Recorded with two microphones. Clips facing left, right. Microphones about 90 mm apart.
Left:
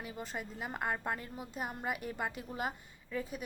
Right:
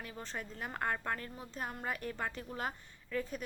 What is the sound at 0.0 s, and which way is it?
A woman's voice, 10° left (ahead or behind).